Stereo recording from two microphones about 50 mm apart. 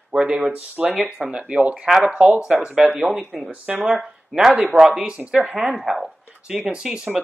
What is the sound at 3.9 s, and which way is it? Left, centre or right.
Speech, centre.